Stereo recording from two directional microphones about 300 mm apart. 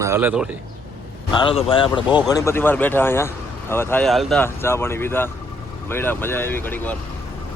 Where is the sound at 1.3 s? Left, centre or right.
Centre.